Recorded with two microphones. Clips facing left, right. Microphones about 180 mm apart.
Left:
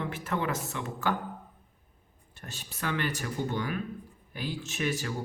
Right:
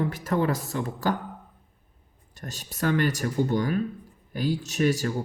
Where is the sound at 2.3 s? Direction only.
40° right (ahead or behind).